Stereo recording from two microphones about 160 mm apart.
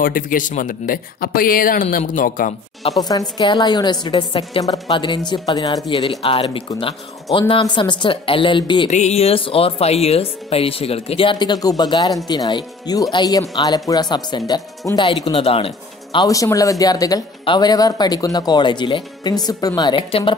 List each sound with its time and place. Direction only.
0.0 s speech: 60° left (ahead or behind)
3.0 s speech: 25° left (ahead or behind)
8.9 s speech: 45° left (ahead or behind)
16.3 s speech: 20° left (ahead or behind)
20.0 s speech: 35° left (ahead or behind)